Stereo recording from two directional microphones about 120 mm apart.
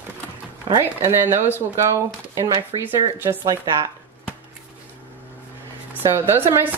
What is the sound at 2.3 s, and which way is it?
Speech, 40° right (ahead or behind).